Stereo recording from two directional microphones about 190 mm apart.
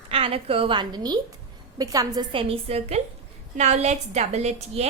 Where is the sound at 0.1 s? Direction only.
30° right (ahead or behind).